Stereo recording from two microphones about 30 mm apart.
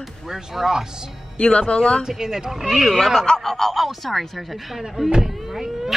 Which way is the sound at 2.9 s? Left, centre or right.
Centre.